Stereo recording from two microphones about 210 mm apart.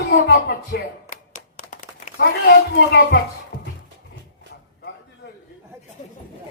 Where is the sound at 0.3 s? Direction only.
50° left (ahead or behind).